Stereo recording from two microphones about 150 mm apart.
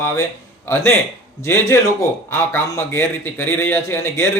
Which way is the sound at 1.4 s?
15° left (ahead or behind).